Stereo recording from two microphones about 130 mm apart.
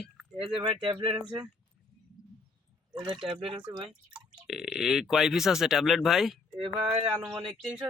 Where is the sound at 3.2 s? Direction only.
45° right (ahead or behind).